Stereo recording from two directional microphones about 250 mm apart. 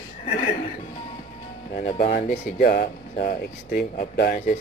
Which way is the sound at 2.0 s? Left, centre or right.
Left.